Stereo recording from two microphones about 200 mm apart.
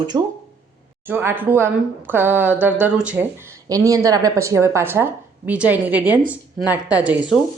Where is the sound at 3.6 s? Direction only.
15° right (ahead or behind).